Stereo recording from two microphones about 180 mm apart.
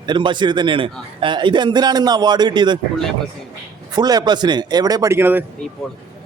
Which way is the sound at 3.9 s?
20° right (ahead or behind).